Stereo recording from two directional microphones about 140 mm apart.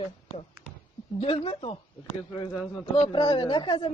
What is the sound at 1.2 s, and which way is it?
Speech, 40° left (ahead or behind).